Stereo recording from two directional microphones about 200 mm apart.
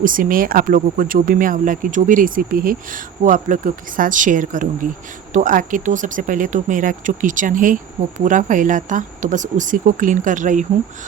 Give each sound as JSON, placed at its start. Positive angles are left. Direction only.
{"t": 0.0, "sound": "speech", "side_deg": -45}